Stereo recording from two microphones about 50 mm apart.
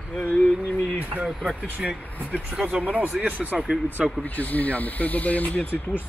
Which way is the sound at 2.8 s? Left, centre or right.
Right.